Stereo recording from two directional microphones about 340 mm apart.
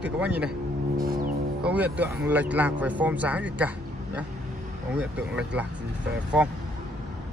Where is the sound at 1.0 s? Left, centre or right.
Right.